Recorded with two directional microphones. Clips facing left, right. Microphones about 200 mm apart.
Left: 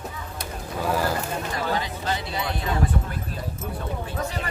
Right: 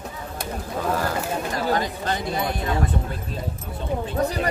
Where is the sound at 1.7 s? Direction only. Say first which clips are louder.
Right 3 dB; 45° right (ahead or behind).